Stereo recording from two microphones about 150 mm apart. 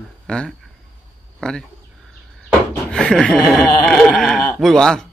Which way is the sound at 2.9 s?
5° left (ahead or behind).